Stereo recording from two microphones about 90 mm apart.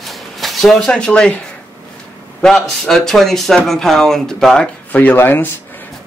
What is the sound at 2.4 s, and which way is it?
Speech, 5° left (ahead or behind).